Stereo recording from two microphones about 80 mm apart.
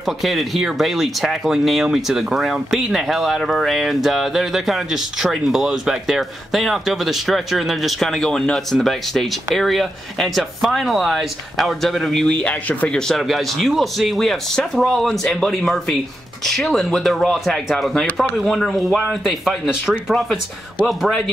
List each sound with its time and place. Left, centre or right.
0.0 s speech: centre
13.1 s speech: centre